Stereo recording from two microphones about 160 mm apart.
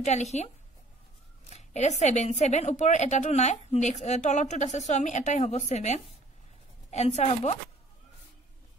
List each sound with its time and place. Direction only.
0.0 s speech: 45° left (ahead or behind)
1.5 s speech: 45° left (ahead or behind)